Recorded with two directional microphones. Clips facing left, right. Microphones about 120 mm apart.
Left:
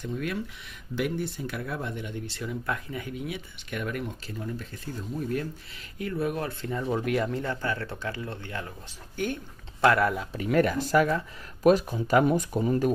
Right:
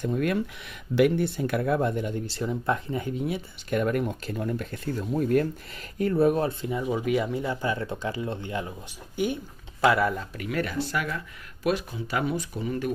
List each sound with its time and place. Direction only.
0.0 s speech: 50° right (ahead or behind)
0.9 s speech: 65° right (ahead or behind)
5.9 s speech: 40° right (ahead or behind)
6.6 s speech: 10° right (ahead or behind)
9.8 s speech: centre (ahead or behind)
10.5 s speech: 45° left (ahead or behind)